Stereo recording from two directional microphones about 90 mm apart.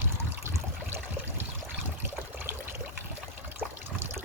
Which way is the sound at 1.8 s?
25° right (ahead or behind).